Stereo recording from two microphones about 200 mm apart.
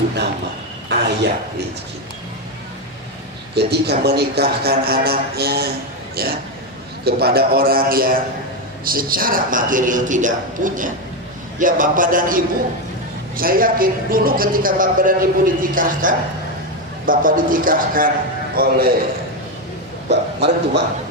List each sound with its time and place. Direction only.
0.9 s a sound: 60° right (ahead or behind)
3.5 s a man's voice: 55° right (ahead or behind)
20.1 s speech: 55° right (ahead or behind)